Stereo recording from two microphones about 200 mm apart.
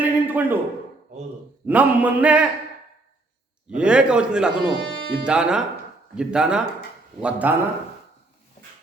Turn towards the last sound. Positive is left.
turn(degrees=-10)  # may be behind; listen again after turning